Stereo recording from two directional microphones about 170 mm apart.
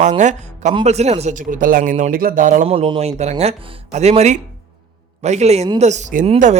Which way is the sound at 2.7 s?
30° right (ahead or behind).